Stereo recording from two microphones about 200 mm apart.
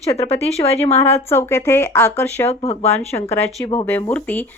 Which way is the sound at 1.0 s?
10° left (ahead or behind).